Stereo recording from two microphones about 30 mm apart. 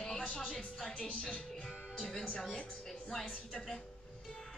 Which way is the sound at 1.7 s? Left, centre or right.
Right.